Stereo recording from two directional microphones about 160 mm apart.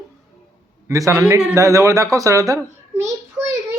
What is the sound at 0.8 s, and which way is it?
A child's voice, 20° right (ahead or behind).